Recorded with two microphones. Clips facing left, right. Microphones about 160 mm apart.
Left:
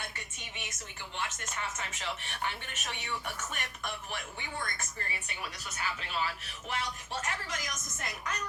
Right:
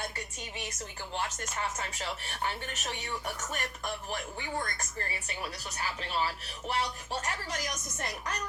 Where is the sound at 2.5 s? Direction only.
35° right (ahead or behind).